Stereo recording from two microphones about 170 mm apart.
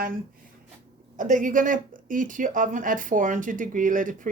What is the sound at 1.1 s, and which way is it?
Speech, 50° right (ahead or behind).